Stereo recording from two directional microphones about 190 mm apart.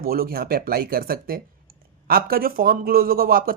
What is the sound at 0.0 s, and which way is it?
Speech, 50° right (ahead or behind).